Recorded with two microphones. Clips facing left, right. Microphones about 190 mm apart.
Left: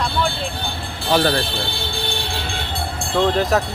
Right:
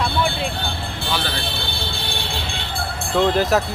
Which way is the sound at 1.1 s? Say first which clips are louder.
Left 10 dB; 45° left (ahead or behind).